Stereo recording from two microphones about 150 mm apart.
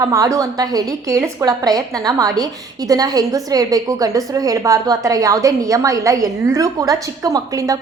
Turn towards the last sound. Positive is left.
turn(degrees=-25)  # may be behind; listen again after turning